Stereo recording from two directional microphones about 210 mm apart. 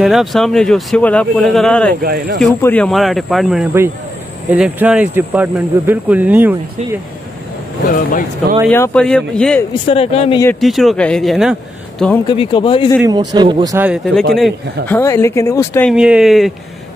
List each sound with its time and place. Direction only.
0.0 s speech: centre (ahead or behind)
2.0 s speech: 45° right (ahead or behind)
2.6 s speech: 5° left (ahead or behind)
7.9 s speech: 40° left (ahead or behind)
8.6 s speech: 10° left (ahead or behind)
9.8 s a man's voice: 25° left (ahead or behind)
10.6 s speech: centre (ahead or behind)
12.3 s a man's voice: 25° left (ahead or behind)
13.0 s a man's voice: 20° right (ahead or behind)
13.7 s speech: 5° right (ahead or behind)
14.9 s speech: 10° left (ahead or behind)
15.9 s speech: 5° right (ahead or behind)